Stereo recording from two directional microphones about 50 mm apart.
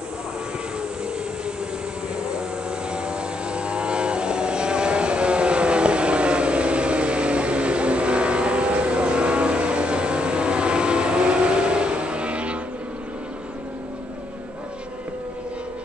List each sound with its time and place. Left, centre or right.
2.9 s vehicle: centre